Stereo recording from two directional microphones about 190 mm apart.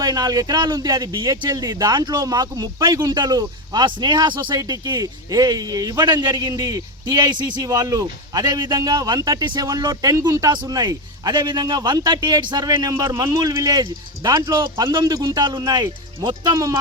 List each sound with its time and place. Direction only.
0.0 s speech: 20° right (ahead or behind)